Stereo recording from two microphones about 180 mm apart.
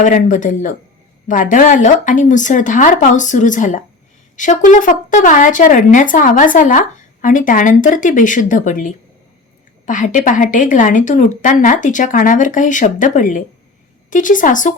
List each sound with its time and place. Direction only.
0.0 s speech: 45° left (ahead or behind)